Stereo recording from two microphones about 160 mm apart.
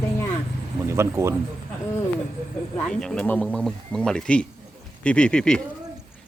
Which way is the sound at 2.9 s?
5° left (ahead or behind).